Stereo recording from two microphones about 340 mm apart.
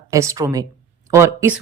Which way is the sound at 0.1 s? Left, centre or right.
Centre.